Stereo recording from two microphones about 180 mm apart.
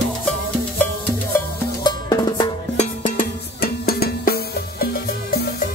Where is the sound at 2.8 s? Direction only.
45° left (ahead or behind).